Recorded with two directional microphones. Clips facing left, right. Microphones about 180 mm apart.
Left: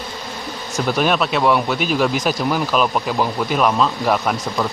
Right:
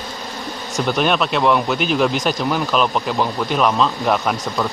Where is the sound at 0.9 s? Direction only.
Centre (ahead or behind).